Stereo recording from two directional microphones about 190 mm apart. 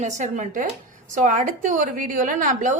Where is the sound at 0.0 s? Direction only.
40° right (ahead or behind).